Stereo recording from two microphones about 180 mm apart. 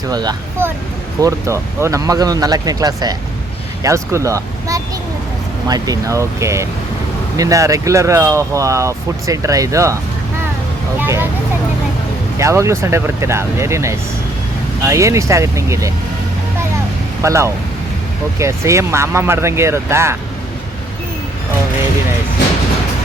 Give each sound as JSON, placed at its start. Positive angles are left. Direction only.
{"t": 0.1, "sound": "speech", "side_deg": -20}
{"t": 11.0, "sound": "vehicle", "side_deg": -10}
{"t": 12.4, "sound": "speech", "side_deg": -15}
{"t": 17.2, "sound": "speech", "side_deg": -15}